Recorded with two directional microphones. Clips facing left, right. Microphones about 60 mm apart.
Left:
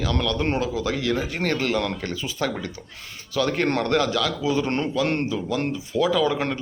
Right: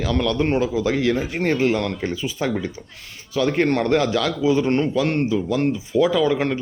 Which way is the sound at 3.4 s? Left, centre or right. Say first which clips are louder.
Right 3 dB; right.